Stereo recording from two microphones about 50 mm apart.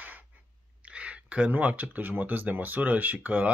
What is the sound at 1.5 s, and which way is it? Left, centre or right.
Speech, right.